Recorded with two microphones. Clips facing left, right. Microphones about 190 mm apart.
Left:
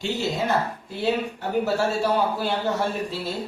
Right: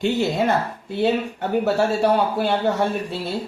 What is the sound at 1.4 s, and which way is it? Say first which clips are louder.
Speech: right 3 dB; 65° right (ahead or behind).